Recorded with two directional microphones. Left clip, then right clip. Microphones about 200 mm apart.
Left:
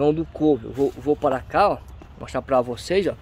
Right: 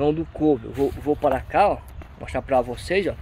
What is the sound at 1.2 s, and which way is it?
Speech, 15° left (ahead or behind).